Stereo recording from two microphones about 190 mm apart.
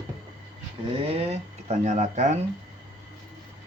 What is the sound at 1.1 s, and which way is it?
Speech, 30° right (ahead or behind).